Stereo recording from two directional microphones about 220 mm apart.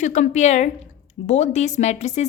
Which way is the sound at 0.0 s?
35° left (ahead or behind).